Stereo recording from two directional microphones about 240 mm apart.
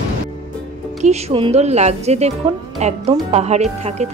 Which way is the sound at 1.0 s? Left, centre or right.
Right.